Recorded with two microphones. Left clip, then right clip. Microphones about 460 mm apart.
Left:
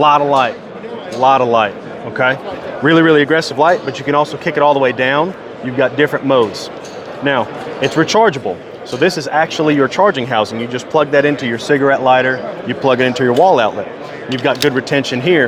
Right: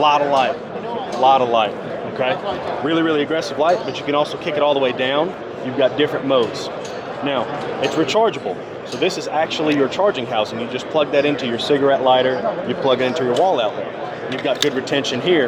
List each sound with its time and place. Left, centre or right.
0.0 s speech: left
2.8 s speech: left
7.9 s speech: left
14.4 s speech: left